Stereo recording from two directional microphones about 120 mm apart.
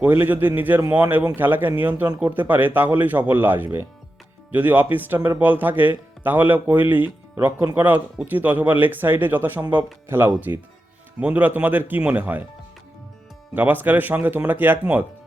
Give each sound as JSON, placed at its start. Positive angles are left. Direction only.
{"t": 0.0, "sound": "speech", "side_deg": -15}
{"t": 13.5, "sound": "speech", "side_deg": -15}